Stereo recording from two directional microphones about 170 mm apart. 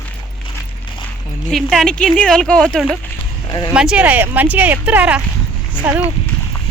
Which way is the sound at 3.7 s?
5° right (ahead or behind).